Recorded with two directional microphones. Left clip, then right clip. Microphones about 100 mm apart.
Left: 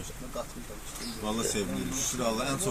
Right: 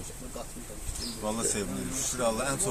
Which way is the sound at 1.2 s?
Centre (ahead or behind).